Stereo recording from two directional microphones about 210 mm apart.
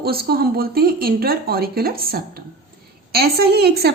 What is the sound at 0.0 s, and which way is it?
Speech, 45° right (ahead or behind).